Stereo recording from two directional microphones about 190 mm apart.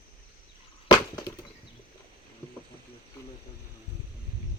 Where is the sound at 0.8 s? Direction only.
25° left (ahead or behind).